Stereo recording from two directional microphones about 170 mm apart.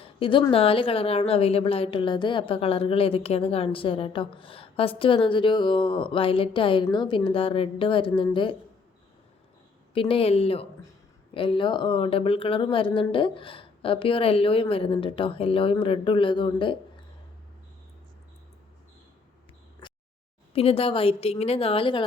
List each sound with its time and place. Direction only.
0.2 s a woman's voice: 30° left (ahead or behind)
9.9 s a woman's voice: 30° left (ahead or behind)
19.8 s a sound: 30° left (ahead or behind)
20.5 s a woman's voice: 35° left (ahead or behind)